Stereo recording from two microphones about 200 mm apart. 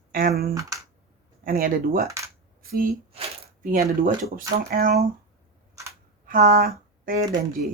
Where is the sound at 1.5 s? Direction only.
45° right (ahead or behind).